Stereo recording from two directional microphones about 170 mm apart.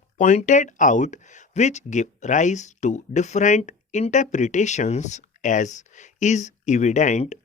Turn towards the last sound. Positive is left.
turn(degrees=45)  # may be behind; listen again after turning